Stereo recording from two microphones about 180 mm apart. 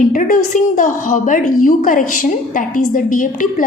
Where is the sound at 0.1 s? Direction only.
45° left (ahead or behind).